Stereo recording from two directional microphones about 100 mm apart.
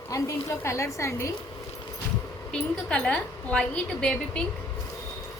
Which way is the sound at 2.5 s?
10° left (ahead or behind).